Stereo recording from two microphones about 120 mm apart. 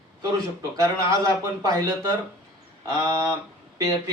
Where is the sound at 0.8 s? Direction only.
30° right (ahead or behind).